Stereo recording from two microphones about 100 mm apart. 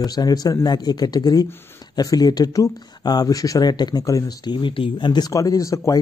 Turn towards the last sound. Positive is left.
turn(degrees=35)  # may be behind; listen again after turning